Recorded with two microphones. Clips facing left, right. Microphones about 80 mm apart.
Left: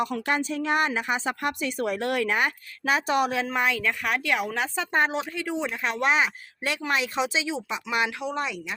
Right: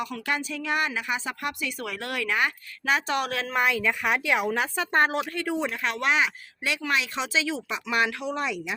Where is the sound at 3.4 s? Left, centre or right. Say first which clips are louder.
Right 1 dB; centre.